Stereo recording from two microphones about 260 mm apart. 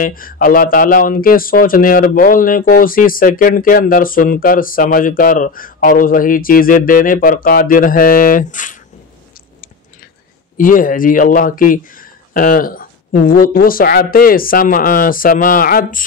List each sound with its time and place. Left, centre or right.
0.0 s speech: left
10.6 s speech: left